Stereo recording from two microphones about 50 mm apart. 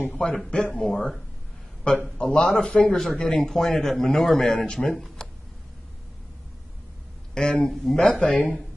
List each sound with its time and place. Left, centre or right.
0.1 s speech: centre
0.9 s speech: centre
2.1 s speech: centre
7.3 s speech: centre